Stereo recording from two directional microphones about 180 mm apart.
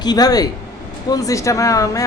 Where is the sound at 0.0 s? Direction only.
20° left (ahead or behind).